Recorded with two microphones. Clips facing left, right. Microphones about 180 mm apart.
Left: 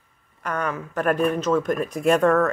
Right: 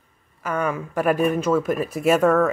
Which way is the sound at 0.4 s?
5° right (ahead or behind).